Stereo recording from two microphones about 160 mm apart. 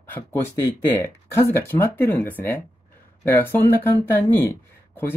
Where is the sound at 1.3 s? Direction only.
15° left (ahead or behind).